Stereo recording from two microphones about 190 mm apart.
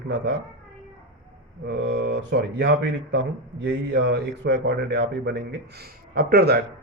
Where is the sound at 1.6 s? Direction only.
65° right (ahead or behind).